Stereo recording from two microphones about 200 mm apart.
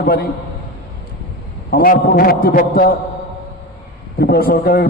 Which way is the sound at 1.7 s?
50° left (ahead or behind).